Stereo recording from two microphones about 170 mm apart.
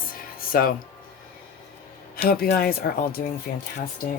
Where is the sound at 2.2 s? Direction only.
60° left (ahead or behind).